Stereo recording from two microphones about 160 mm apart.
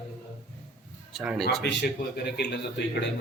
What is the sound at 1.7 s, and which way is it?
Speech, 90° left.